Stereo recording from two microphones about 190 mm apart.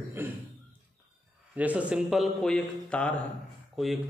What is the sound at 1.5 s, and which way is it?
A man's voice, 5° right (ahead or behind).